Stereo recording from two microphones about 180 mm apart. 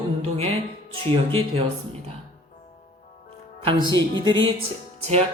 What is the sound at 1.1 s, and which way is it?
Speech, 35° right (ahead or behind).